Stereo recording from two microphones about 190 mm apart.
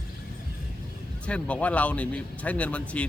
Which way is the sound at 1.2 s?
5° left (ahead or behind).